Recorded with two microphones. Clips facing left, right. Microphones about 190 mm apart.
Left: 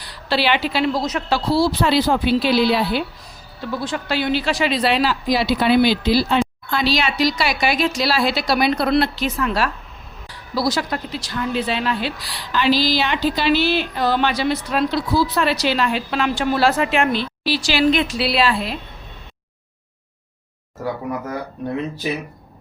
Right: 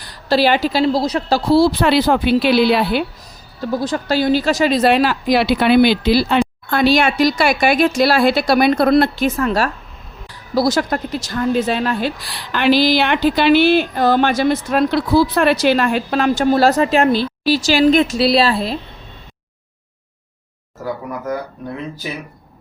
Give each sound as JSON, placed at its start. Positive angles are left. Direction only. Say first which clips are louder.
{"t": 0.0, "sound": "a woman's voice", "louder": "right 6 dB", "side_deg": -45}
{"t": 1.5, "sound": "speech", "louder": "right 5 dB", "side_deg": -55}
{"t": 3.6, "sound": "speech", "louder": "right 5 dB", "side_deg": -40}